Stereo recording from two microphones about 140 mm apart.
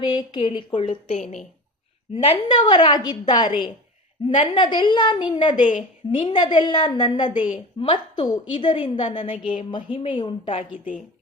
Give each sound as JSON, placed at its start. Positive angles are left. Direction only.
{"t": 0.0, "sound": "a woman's voice", "side_deg": 35}
{"t": 1.1, "sound": "a woman's voice", "side_deg": 60}
{"t": 2.1, "sound": "a woman's voice", "side_deg": 45}